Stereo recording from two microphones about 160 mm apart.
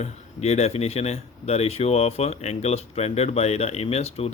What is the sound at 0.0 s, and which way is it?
Speech, 40° left (ahead or behind).